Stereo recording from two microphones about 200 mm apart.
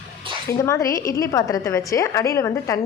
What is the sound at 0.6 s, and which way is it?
A woman's voice, 15° left (ahead or behind).